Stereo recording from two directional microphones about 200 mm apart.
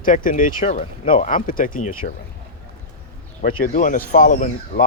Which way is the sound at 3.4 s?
40° left (ahead or behind).